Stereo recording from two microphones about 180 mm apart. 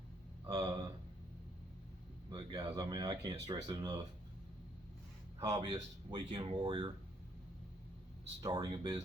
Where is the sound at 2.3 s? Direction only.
25° right (ahead or behind).